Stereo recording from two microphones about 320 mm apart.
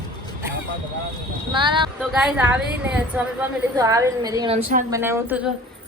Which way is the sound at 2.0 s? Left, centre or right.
Centre.